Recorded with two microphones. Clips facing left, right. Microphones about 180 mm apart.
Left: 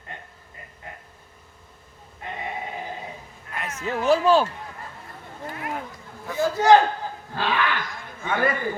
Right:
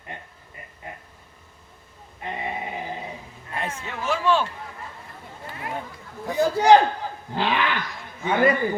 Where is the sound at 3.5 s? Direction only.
30° right (ahead or behind).